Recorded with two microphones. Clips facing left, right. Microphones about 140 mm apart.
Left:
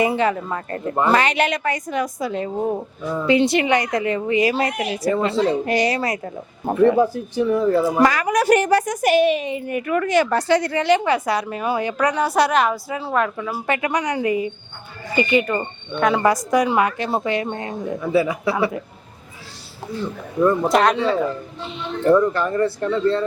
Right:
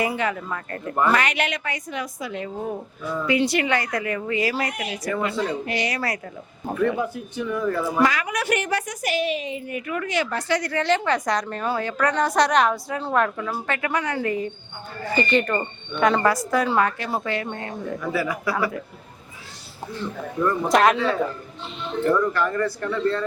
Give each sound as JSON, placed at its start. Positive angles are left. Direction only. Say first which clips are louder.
{"t": 0.0, "sound": "a woman's voice", "louder": "left 5 dB", "side_deg": 30}
{"t": 5.6, "sound": "a woman's voice", "louder": "left 7 dB", "side_deg": 40}
{"t": 5.9, "sound": "a woman's voice", "louder": "left 5 dB", "side_deg": 25}
{"t": 7.9, "sound": "a woman's voice", "louder": "left 4 dB", "side_deg": 40}
{"t": 10.4, "sound": "a woman's voice", "louder": "left 5 dB", "side_deg": 25}
{"t": 16.2, "sound": "a woman's voice", "louder": "left 4 dB", "side_deg": 15}
{"t": 20.7, "sound": "speech", "louder": "left 1 dB", "side_deg": 0}
{"t": 22.1, "sound": "a woman's voice", "louder": "left 6 dB", "side_deg": 25}